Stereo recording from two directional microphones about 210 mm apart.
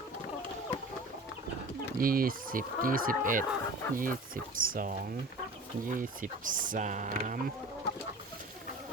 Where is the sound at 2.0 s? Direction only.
45° right (ahead or behind).